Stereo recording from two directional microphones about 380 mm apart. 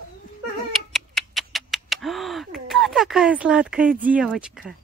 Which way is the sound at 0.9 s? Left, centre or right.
Centre.